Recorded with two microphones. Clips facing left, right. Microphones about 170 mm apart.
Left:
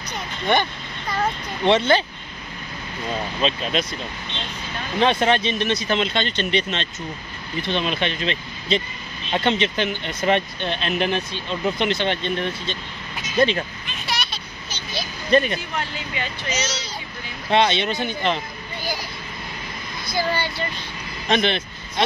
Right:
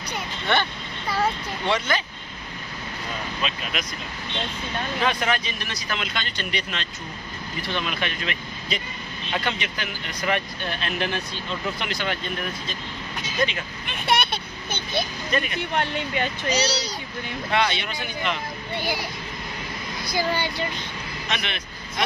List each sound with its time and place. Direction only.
0.5 s speech: 15° left (ahead or behind)
1.0 s a child's voice: 5° right (ahead or behind)
1.7 s speech: 30° left (ahead or behind)
3.3 s speech: 30° left (ahead or behind)
5.0 s speech: 25° left (ahead or behind)
13.8 s a sound: 60° right (ahead or behind)
15.3 s speech: 30° left (ahead or behind)
15.7 s speech: 65° right (ahead or behind)
16.4 s a child's voice: 35° right (ahead or behind)
17.5 s speech: 25° left (ahead or behind)
20.1 s a child's voice: 15° right (ahead or behind)
21.3 s speech: 30° left (ahead or behind)